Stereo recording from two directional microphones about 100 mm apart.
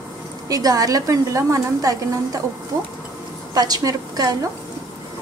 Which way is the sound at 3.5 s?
40° right (ahead or behind).